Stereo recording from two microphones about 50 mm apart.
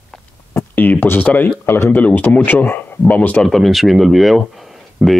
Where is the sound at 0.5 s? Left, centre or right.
Left.